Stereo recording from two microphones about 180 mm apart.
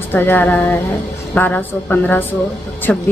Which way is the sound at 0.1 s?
10° left (ahead or behind).